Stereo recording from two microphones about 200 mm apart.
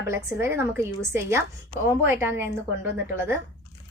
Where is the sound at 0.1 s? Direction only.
10° right (ahead or behind).